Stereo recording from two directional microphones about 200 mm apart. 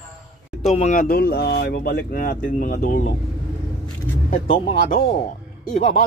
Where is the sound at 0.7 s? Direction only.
35° left (ahead or behind).